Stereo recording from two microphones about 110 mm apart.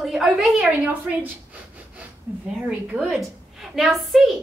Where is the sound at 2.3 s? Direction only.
15° right (ahead or behind).